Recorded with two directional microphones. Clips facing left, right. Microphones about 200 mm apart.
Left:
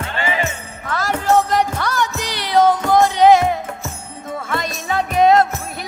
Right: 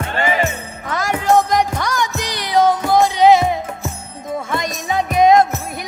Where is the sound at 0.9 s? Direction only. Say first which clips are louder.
Right 1 dB; 15° right (ahead or behind).